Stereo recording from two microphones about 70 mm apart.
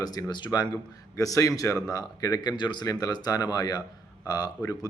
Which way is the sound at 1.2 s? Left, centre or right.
Left.